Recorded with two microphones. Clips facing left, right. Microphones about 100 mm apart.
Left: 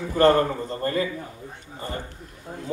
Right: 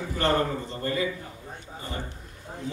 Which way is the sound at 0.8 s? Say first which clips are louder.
Left 4 dB; 45° left (ahead or behind).